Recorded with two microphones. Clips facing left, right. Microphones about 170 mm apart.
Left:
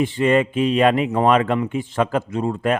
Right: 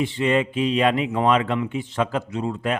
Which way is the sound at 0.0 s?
50° left (ahead or behind).